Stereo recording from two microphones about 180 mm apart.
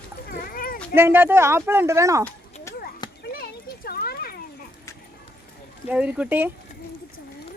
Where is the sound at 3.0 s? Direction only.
25° left (ahead or behind).